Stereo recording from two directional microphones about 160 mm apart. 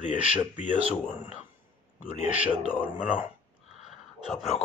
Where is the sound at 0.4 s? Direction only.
50° left (ahead or behind).